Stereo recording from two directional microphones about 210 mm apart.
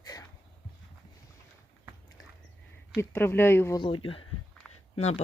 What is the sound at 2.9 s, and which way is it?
Speech, 10° left (ahead or behind).